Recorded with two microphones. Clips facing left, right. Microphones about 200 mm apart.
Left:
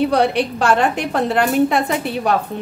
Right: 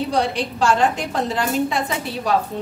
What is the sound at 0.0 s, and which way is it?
A woman's voice, 60° left (ahead or behind).